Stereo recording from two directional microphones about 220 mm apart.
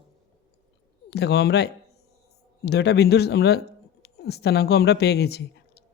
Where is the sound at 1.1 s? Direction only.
50° left (ahead or behind).